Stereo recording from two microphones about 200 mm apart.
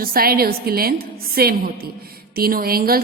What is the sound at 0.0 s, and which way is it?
A woman's voice, 50° right (ahead or behind).